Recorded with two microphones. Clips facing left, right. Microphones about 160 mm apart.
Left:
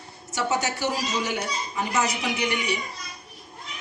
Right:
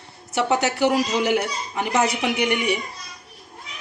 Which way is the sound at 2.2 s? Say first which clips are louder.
Right 5 dB; 60° right (ahead or behind).